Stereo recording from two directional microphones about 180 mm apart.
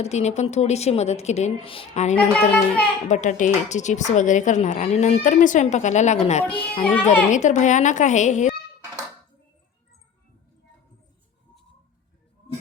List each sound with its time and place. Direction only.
0.0 s speech: 35° left (ahead or behind)
2.1 s a child's voice: 5° left (ahead or behind)
3.1 s speech: 45° left (ahead or behind)
7.3 s speech: 40° left (ahead or behind)